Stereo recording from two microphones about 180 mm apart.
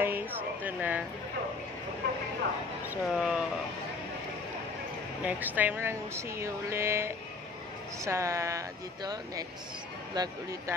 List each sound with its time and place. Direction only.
0.0 s a sound: 10° right (ahead or behind)
2.9 s speech: 5° right (ahead or behind)
5.2 s speech: 10° right (ahead or behind)